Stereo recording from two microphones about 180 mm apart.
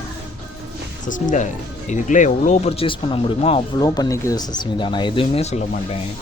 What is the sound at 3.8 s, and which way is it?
Speech, 20° left (ahead or behind).